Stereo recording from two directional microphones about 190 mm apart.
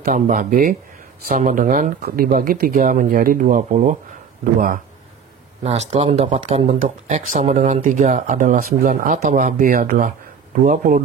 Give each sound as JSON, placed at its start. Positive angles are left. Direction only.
{"t": 0.0, "sound": "speech", "side_deg": -45}
{"t": 5.6, "sound": "speech", "side_deg": -35}